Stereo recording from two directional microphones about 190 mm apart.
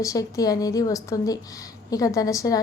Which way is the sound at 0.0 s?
20° left (ahead or behind).